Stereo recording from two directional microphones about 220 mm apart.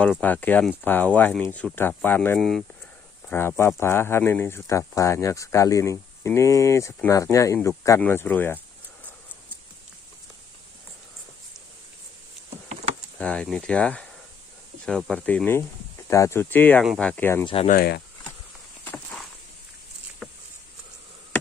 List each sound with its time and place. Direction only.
0.0 s speech: 5° left (ahead or behind)
13.2 s speech: 5° left (ahead or behind)
17.6 s speech: 45° left (ahead or behind)
18.9 s a sound: 10° left (ahead or behind)